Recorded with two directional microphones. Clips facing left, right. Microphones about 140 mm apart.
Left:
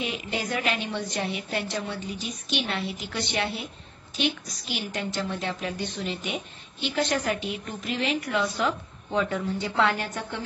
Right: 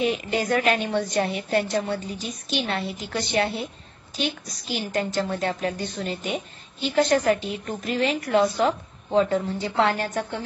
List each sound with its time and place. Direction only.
0.0 s a woman's voice: 45° right (ahead or behind)